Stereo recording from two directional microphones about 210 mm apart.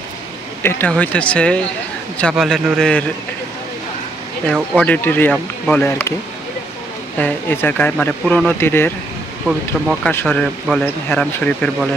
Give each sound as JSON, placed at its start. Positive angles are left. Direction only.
{"t": 0.6, "sound": "speech", "side_deg": 10}
{"t": 4.7, "sound": "speech", "side_deg": 5}
{"t": 7.2, "sound": "speech", "side_deg": 10}
{"t": 10.1, "sound": "speech", "side_deg": 5}